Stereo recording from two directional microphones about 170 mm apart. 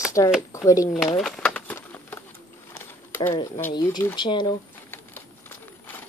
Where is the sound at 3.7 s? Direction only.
25° left (ahead or behind).